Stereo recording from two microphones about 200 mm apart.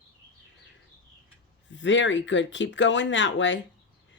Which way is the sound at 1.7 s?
65° left (ahead or behind).